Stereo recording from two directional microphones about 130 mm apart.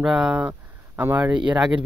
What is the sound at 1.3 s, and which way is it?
Speech, 35° right (ahead or behind).